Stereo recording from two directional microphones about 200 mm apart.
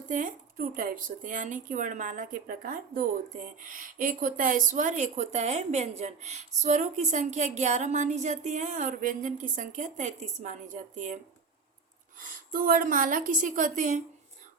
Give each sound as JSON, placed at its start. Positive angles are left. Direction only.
{"t": 0.1, "sound": "speech", "side_deg": -40}
{"t": 12.5, "sound": "speech", "side_deg": -45}